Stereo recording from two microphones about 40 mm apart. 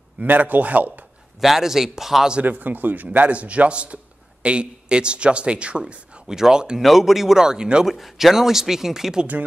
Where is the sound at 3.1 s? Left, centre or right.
Right.